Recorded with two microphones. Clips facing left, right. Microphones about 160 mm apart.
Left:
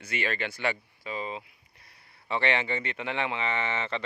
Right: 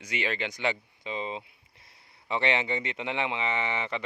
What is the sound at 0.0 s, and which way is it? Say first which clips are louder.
Speech: even; 15° right (ahead or behind).